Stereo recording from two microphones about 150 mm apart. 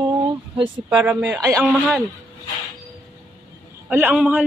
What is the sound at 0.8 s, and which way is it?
Speech, 10° right (ahead or behind).